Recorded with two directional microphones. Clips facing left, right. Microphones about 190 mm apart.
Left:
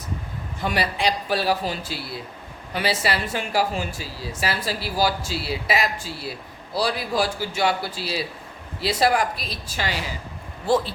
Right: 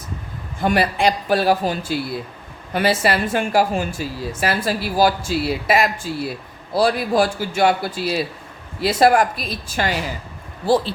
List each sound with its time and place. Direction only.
0.6 s speech: 50° right (ahead or behind)
10.7 s speech: 30° right (ahead or behind)